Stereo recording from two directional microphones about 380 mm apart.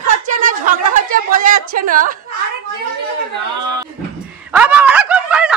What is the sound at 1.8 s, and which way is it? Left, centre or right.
Speech, right.